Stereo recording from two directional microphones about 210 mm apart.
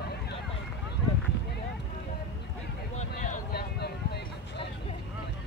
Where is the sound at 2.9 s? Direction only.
35° left (ahead or behind).